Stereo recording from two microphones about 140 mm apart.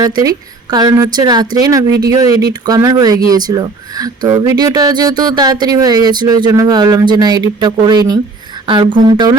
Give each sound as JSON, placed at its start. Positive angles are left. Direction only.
{"t": 0.2, "sound": "speech", "side_deg": -25}